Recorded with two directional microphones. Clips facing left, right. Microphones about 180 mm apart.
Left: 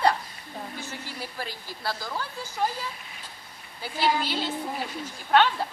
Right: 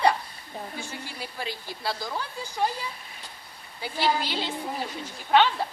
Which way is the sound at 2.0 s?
15° right (ahead or behind).